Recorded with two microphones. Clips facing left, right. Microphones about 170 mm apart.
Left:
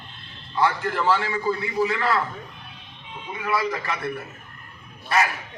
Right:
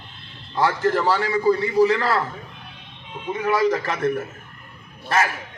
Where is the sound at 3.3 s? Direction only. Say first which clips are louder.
Right 6 dB; 40° right (ahead or behind).